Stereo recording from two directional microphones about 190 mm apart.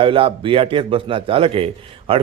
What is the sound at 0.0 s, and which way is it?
A man's voice, 30° right (ahead or behind).